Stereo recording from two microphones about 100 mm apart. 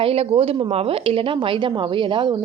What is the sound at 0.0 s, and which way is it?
A woman's voice, 70° right (ahead or behind).